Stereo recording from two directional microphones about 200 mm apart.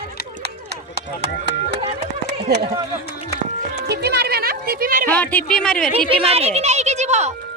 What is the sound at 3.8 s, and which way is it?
Speech, 55° right (ahead or behind).